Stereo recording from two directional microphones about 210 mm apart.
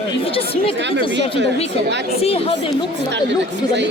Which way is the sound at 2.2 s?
30° left (ahead or behind).